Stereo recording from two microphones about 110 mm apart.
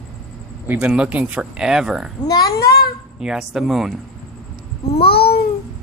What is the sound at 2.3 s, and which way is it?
Speech, 40° left (ahead or behind).